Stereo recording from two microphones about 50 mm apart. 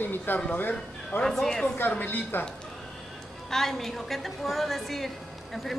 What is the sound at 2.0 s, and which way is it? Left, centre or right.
Speech, left.